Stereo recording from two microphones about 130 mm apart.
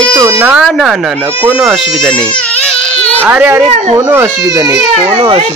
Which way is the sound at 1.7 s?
5° left (ahead or behind).